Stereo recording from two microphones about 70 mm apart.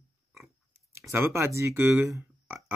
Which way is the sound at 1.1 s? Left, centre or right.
Right.